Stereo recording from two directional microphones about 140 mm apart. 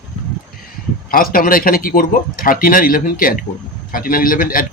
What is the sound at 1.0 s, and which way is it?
A man's voice, 90° left.